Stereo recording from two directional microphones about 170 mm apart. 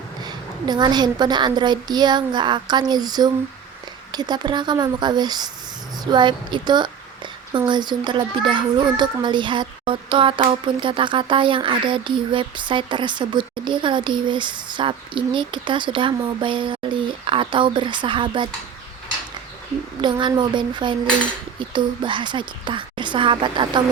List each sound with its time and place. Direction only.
0.2 s a woman's voice: 25° right (ahead or behind)
20.0 s a woman's voice: 25° right (ahead or behind)